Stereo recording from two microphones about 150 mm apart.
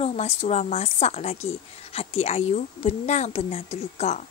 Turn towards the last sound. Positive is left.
turn(degrees=45)  # may be behind; listen again after turning